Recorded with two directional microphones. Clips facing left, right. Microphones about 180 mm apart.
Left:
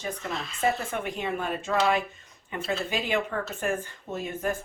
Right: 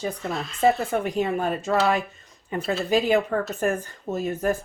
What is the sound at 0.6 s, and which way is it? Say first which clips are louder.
Speech: right 7 dB; 35° right (ahead or behind).